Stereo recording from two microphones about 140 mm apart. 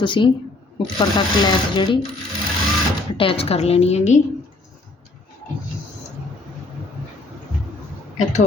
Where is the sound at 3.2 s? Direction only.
40° left (ahead or behind).